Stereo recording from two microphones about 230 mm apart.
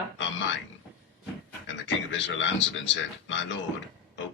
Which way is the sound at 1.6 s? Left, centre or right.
Left.